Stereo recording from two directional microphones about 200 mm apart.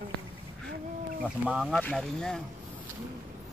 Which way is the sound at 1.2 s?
5° right (ahead or behind).